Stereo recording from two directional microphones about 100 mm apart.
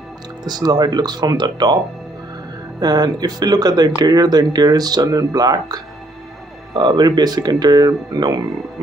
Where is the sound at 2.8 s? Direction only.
40° right (ahead or behind).